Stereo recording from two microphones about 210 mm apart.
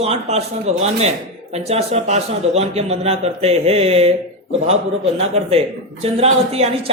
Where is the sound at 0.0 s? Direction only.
30° right (ahead or behind).